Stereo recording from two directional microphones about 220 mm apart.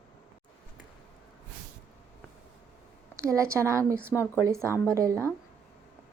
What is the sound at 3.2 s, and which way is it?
A woman's voice, 15° right (ahead or behind).